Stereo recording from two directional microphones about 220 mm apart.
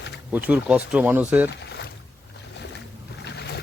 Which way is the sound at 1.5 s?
50° left (ahead or behind).